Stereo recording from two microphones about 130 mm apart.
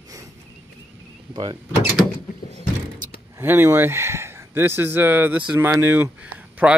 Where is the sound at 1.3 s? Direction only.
35° right (ahead or behind).